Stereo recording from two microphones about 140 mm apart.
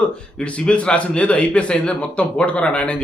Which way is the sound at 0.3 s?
10° left (ahead or behind).